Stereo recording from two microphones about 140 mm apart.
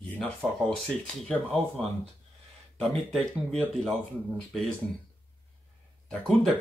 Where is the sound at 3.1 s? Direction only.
5° left (ahead or behind).